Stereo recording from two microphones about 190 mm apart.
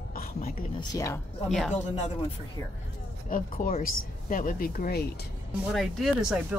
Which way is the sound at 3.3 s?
45° left (ahead or behind).